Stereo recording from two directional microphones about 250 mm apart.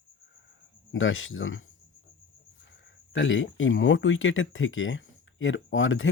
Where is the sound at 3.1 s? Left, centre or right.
Left.